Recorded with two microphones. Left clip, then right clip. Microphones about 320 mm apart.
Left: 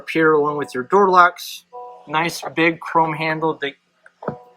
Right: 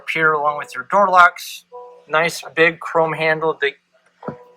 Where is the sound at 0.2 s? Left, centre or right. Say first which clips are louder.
Left 1 dB; right.